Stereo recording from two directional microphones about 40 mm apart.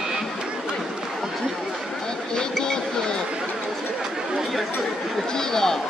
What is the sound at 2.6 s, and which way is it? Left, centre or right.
Music, centre.